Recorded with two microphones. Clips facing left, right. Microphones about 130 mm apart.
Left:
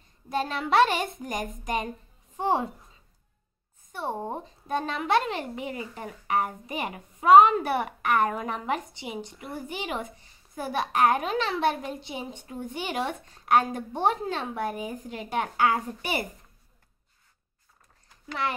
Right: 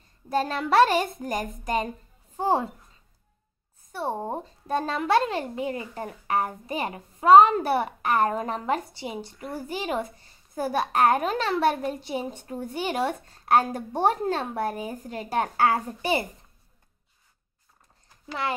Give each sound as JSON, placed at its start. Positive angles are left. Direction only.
{"t": 0.3, "sound": "a woman's voice", "side_deg": -40}
{"t": 3.9, "sound": "a woman's voice", "side_deg": -40}